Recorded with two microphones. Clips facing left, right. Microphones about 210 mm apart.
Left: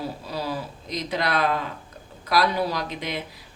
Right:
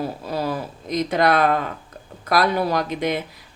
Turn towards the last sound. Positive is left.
turn(degrees=-50)  # may be behind; listen again after turning